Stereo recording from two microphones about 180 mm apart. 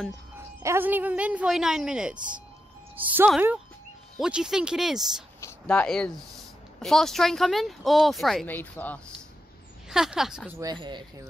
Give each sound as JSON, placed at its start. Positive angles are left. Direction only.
{"t": 0.6, "sound": "speech", "side_deg": -15}
{"t": 9.8, "sound": "speech", "side_deg": -5}
{"t": 10.6, "sound": "speech", "side_deg": -25}